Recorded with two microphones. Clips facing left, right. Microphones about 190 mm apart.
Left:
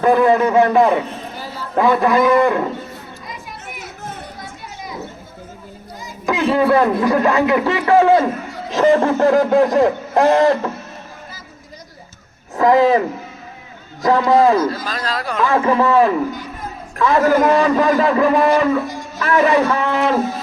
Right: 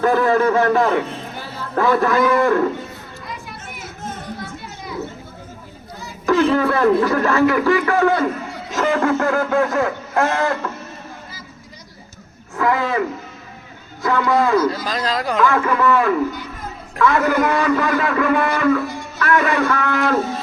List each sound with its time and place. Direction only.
0.0 s a man's voice: 20° left (ahead or behind)
6.2 s a man's voice: 15° left (ahead or behind); by 10.6 s 35° left (ahead or behind)
12.5 s speech: 35° left (ahead or behind)
14.1 s a man's voice: 25° left (ahead or behind)
14.8 s speech: 20° right (ahead or behind)
15.4 s a man's voice: 25° left (ahead or behind)